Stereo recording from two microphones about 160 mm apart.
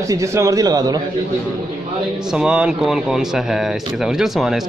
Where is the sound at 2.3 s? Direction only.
5° right (ahead or behind).